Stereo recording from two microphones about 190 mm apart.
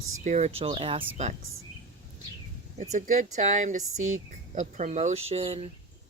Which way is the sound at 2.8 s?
40° right (ahead or behind).